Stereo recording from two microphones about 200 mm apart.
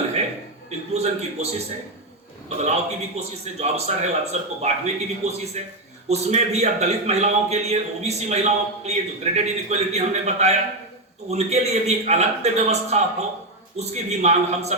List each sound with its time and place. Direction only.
0.7 s a man's voice: 35° right (ahead or behind)